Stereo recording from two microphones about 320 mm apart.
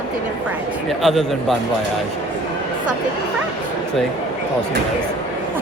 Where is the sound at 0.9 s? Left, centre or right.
Centre.